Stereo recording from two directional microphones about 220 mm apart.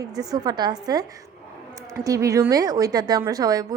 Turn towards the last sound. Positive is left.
turn(degrees=-15)  # may be behind; listen again after turning